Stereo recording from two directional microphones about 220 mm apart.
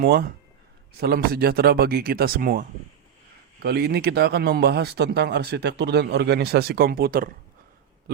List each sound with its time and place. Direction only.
0.0 s speech: 45° right (ahead or behind)